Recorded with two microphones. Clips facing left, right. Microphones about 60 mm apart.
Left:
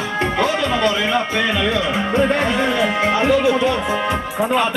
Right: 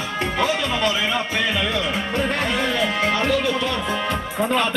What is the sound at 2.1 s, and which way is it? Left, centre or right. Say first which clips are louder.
Music: left 6 dB; left.